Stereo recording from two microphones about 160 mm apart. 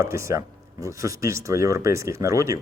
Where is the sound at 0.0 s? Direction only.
15° right (ahead or behind).